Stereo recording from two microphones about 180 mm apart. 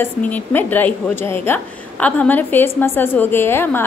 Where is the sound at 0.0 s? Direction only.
10° left (ahead or behind).